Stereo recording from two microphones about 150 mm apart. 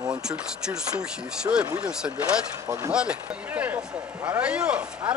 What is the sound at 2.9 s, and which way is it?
Speech, 5° right (ahead or behind).